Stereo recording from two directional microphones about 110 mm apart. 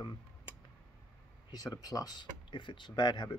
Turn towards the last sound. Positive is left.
turn(degrees=40)  # may be behind; listen again after turning